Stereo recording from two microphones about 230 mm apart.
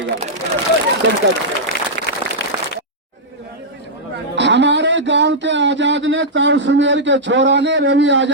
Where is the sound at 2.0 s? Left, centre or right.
Right.